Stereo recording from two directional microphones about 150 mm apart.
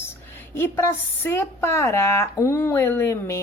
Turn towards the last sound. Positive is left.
turn(degrees=15)  # may be behind; listen again after turning